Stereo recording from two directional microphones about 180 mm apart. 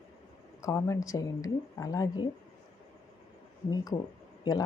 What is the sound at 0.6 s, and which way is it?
Speech, 15° left (ahead or behind).